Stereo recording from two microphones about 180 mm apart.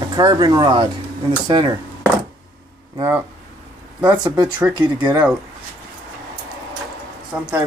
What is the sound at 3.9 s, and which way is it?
Speech, 10° right (ahead or behind).